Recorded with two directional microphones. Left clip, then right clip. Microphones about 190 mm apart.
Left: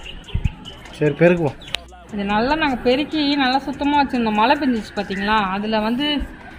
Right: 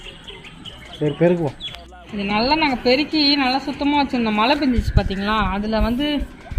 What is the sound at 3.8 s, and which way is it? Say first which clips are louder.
Speech: left 1 dB; 15° right (ahead or behind).